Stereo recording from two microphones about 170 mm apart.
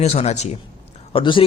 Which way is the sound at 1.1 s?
30° left (ahead or behind).